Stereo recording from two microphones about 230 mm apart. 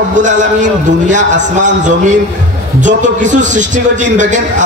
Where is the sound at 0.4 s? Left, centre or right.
Right.